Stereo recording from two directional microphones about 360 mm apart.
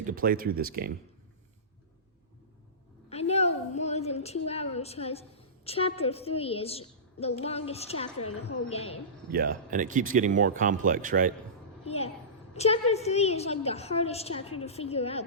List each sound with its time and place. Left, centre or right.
0.0 s speech: right
3.1 s a sound: centre
5.6 s a woman's voice: centre
9.3 s speech: right
11.9 s a woman's voice: centre